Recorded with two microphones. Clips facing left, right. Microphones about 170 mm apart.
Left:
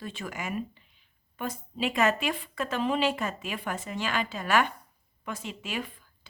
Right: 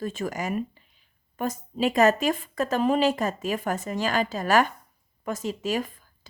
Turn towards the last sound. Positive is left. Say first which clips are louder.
# right 4 dB
turn(degrees=-45)  # may be behind; listen again after turning